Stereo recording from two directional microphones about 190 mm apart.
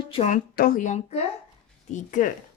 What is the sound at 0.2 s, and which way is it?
A woman's voice, 40° left (ahead or behind).